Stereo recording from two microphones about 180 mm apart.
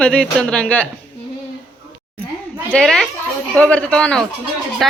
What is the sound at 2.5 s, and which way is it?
A woman's voice, 5° right (ahead or behind).